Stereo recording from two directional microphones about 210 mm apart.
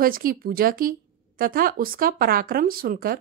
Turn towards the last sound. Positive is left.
turn(degrees=-45)  # may be behind; listen again after turning